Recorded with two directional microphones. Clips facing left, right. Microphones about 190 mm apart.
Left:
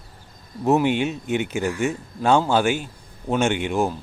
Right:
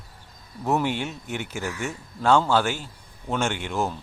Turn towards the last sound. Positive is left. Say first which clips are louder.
# left 5 dB
turn(degrees=15)  # may be behind; listen again after turning